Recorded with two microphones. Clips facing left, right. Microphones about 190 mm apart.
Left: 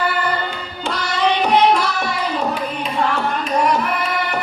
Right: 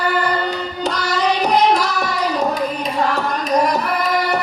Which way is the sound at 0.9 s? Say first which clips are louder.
Even; 40° right (ahead or behind).